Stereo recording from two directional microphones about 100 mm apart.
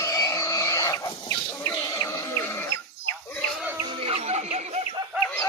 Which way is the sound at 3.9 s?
70° right (ahead or behind).